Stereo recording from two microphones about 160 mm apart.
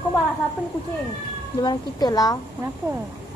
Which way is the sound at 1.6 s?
25° left (ahead or behind).